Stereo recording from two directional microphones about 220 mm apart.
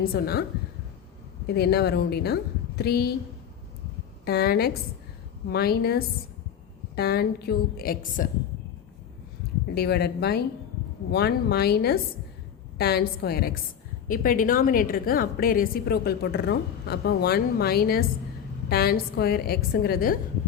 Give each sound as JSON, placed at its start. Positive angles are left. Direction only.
{"t": 0.0, "sound": "a woman's voice", "side_deg": 45}
{"t": 1.5, "sound": "a woman's voice", "side_deg": 45}
{"t": 4.3, "sound": "a woman's voice", "side_deg": 45}
{"t": 9.7, "sound": "a woman's voice", "side_deg": 45}